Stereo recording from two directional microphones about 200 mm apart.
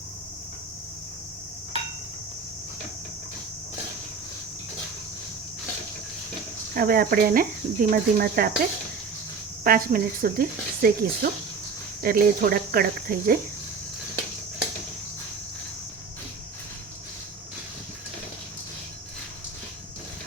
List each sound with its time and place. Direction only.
6.7 s speech: 45° right (ahead or behind)
9.6 s speech: 45° right (ahead or behind)